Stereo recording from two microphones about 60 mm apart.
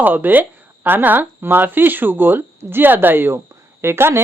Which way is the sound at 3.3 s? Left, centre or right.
Right.